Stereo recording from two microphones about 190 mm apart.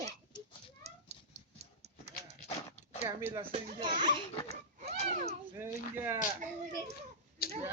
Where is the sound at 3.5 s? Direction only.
30° right (ahead or behind).